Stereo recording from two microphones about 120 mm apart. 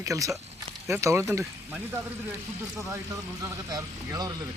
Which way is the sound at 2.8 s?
25° right (ahead or behind).